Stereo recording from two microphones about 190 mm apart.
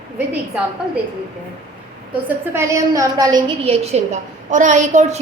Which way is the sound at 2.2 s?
15° right (ahead or behind).